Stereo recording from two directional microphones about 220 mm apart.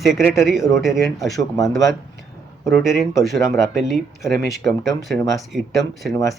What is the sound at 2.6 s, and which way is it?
Speech, centre (ahead or behind).